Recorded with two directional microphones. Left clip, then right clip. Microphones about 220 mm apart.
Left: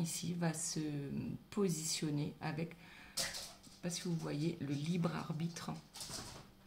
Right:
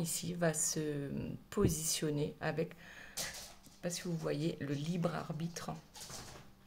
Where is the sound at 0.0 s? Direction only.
35° right (ahead or behind).